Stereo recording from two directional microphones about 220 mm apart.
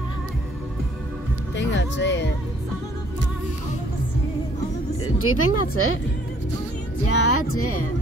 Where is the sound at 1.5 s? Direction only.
55° left (ahead or behind).